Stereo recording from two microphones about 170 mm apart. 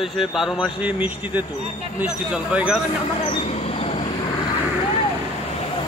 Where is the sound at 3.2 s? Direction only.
40° left (ahead or behind).